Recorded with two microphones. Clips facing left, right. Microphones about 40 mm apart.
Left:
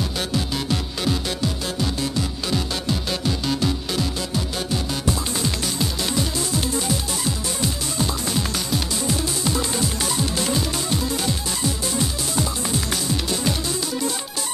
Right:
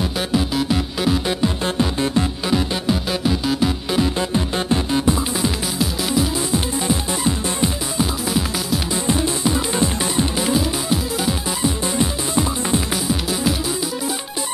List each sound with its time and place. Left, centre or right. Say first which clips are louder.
0.6 s music: right 5 dB; centre
1.6 s music: right 5 dB; right
2.5 s music: right 5 dB; centre
5.8 s music: right 6 dB; centre
6.5 s music: right 3 dB; right
8.0 s music: right 3 dB; centre
9.0 s music: right 4 dB; right
11.6 s music: right 4 dB; right
12.9 s music: right 3 dB; centre